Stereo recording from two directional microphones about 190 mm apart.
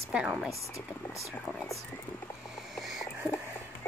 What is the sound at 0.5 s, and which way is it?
Speech, 15° left (ahead or behind).